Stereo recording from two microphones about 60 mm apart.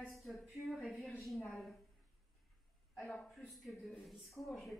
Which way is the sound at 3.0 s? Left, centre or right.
Centre.